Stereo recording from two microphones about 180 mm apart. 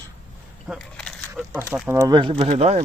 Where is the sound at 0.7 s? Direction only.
5° left (ahead or behind).